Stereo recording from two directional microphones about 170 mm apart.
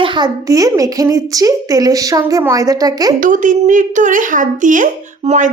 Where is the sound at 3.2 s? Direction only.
50° right (ahead or behind).